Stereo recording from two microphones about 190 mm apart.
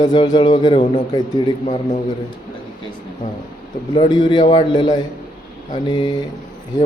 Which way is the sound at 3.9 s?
25° left (ahead or behind).